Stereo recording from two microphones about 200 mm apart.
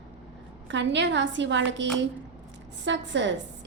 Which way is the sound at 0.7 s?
65° right (ahead or behind).